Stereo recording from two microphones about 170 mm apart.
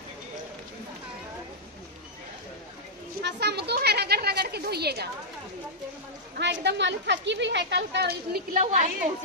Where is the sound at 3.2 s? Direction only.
75° right (ahead or behind).